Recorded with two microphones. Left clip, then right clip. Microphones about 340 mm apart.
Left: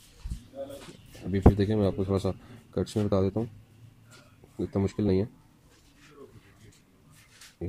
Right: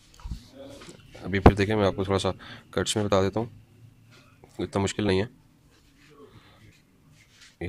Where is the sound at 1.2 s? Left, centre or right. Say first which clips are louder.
Right 5 dB; right.